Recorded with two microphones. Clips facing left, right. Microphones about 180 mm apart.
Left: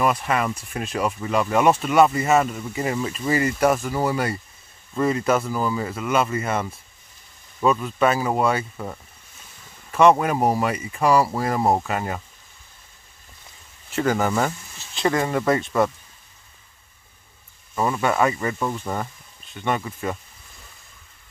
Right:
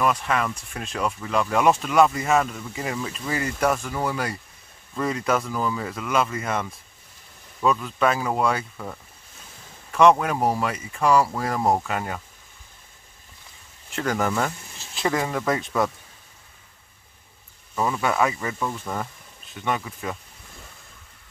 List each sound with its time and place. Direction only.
0.0 s speech: 5° left (ahead or behind)
9.9 s speech: 5° left (ahead or behind)
13.8 s speech: 5° left (ahead or behind)
17.7 s speech: centre (ahead or behind)
18.6 s speech: 10° left (ahead or behind)
19.5 s speech: centre (ahead or behind)